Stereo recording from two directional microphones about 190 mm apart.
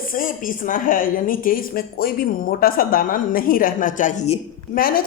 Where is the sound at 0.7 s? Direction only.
45° left (ahead or behind).